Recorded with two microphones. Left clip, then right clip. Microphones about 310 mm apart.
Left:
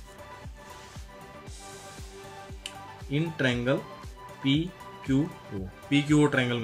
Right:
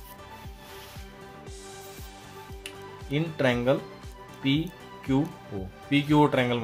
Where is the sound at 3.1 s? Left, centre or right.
Centre.